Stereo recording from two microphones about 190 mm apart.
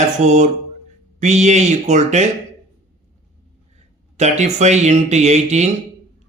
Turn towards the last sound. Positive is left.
turn(degrees=-35)  # may be behind; listen again after turning